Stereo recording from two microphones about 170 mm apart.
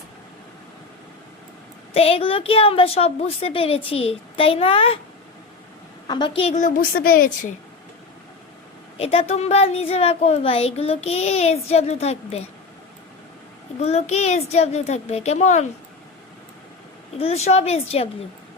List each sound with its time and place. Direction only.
1.9 s speech: 35° left (ahead or behind)
6.1 s a woman's voice: 25° left (ahead or behind)
6.6 s a woman's voice: 55° left (ahead or behind)
9.0 s speech: 35° left (ahead or behind)
13.7 s speech: 40° left (ahead or behind)
17.2 s speech: 35° left (ahead or behind)